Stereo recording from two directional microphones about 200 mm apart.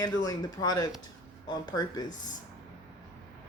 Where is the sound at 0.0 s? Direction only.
20° left (ahead or behind).